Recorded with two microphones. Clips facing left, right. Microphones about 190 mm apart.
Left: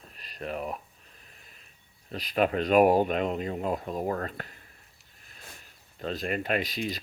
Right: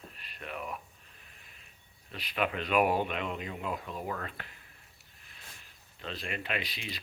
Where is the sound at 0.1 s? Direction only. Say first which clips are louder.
Left 9 dB; 40° left (ahead or behind).